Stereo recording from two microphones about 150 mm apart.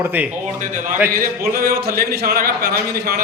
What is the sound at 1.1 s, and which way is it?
Speech, 80° right.